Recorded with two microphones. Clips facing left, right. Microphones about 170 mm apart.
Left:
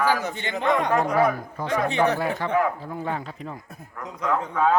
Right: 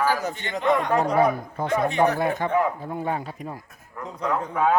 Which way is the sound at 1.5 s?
25° right (ahead or behind).